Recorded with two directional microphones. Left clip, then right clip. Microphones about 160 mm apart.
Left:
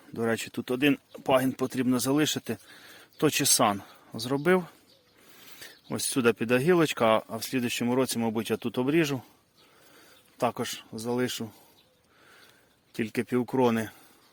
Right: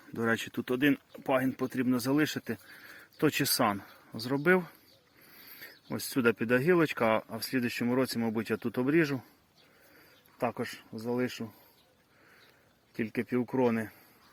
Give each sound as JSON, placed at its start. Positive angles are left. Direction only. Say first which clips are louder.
{"t": 0.1, "sound": "speech", "louder": "left 2 dB", "side_deg": 15}
{"t": 10.3, "sound": "speech", "louder": "left 4 dB", "side_deg": 35}
{"t": 12.9, "sound": "speech", "louder": "left 3 dB", "side_deg": 35}